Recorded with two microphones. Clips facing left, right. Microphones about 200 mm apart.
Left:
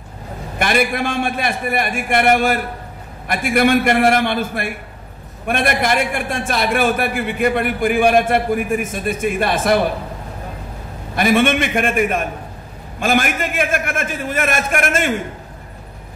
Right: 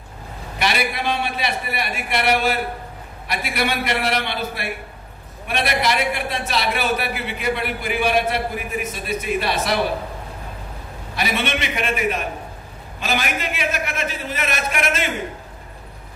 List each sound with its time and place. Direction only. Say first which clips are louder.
0.6 s a man's voice: left 5 dB; 50° left (ahead or behind)
11.1 s a man's voice: left 9 dB; 50° left (ahead or behind)